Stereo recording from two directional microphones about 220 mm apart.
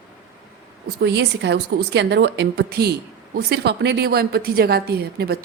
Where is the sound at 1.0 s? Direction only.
50° right (ahead or behind).